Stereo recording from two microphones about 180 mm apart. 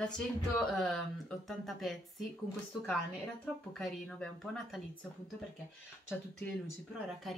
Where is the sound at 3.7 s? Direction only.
5° left (ahead or behind).